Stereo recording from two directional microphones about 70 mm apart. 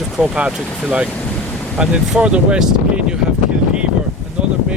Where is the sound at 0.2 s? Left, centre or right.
Centre.